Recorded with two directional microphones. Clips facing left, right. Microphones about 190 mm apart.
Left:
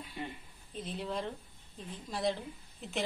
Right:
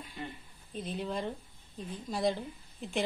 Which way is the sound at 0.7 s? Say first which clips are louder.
Right 2 dB; centre (ahead or behind).